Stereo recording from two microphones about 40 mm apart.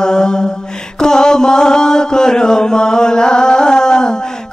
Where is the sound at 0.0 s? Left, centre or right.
Centre.